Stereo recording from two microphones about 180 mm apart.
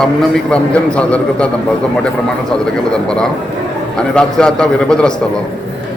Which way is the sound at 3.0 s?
5° left (ahead or behind).